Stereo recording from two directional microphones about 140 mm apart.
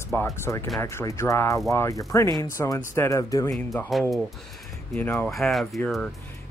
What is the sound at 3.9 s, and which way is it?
Speech, centre (ahead or behind).